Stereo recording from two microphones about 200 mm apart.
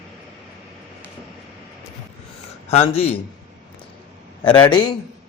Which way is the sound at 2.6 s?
30° left (ahead or behind).